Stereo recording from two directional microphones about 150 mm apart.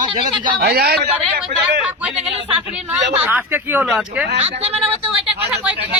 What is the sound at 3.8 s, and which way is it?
Speech, 5° right (ahead or behind).